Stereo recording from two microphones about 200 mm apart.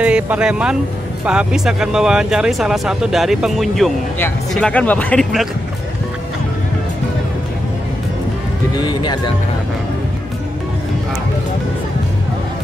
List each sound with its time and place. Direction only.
0.0 s speech: 5° right (ahead or behind)
8.8 s speech: 20° left (ahead or behind)